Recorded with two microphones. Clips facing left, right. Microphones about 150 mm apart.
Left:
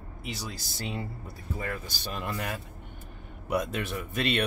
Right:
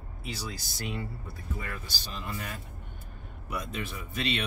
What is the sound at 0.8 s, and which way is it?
Speech, 35° left (ahead or behind).